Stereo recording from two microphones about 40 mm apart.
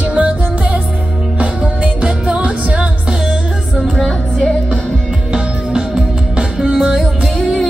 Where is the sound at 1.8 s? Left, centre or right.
Right.